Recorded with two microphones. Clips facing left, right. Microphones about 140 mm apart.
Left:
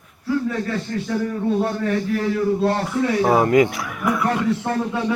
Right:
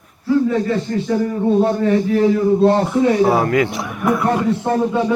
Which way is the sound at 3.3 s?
20° left (ahead or behind).